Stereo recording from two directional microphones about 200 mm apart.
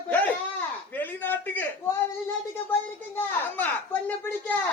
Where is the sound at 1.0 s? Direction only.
10° left (ahead or behind).